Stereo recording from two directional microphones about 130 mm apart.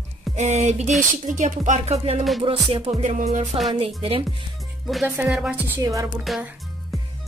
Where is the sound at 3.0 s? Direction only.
65° right (ahead or behind).